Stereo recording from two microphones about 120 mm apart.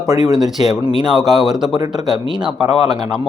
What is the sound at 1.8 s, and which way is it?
Speech, 35° right (ahead or behind).